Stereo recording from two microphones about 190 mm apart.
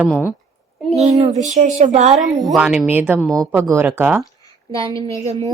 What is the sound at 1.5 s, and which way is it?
Speech, 40° right (ahead or behind).